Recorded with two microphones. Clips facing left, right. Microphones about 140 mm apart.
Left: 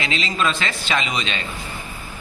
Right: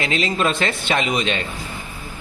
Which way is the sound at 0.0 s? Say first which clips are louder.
Right 2 dB; 50° right (ahead or behind).